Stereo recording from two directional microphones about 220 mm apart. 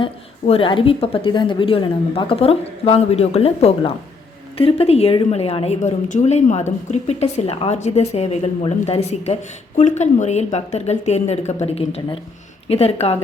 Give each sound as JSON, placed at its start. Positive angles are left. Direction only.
{"t": 0.0, "sound": "a woman's voice", "side_deg": 25}